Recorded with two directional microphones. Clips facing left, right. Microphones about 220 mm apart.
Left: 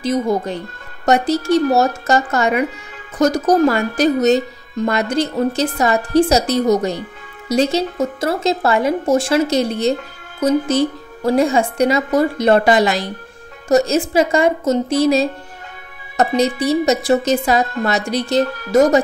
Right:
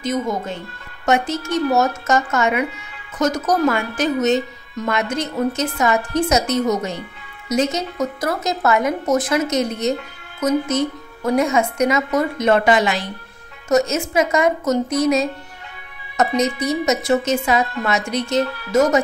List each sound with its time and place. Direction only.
0.0 s a woman's voice: 35° left (ahead or behind)